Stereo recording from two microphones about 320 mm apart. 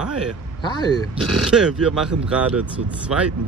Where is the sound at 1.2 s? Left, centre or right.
Centre.